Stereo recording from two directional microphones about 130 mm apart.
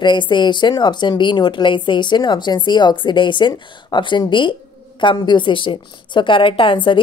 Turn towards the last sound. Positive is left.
turn(degrees=40)  # may be behind; listen again after turning